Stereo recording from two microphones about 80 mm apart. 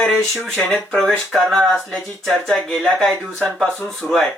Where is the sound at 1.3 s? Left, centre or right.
Centre.